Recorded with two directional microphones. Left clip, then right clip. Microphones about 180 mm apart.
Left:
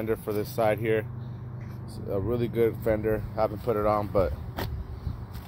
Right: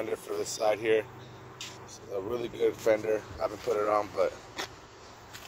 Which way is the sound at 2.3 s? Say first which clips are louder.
Left 3 dB; 5° right (ahead or behind).